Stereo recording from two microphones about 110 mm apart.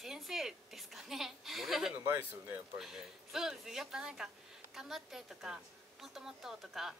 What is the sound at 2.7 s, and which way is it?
A woman's voice, centre (ahead or behind).